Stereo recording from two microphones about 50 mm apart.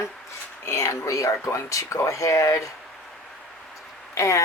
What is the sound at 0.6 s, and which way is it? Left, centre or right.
Speech, left.